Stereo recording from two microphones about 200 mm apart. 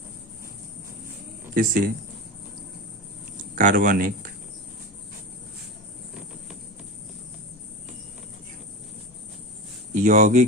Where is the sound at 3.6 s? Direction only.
40° right (ahead or behind).